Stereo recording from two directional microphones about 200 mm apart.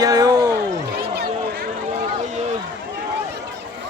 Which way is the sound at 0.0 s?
20° right (ahead or behind).